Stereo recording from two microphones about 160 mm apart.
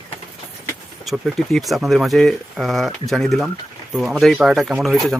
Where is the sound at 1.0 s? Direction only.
Centre (ahead or behind).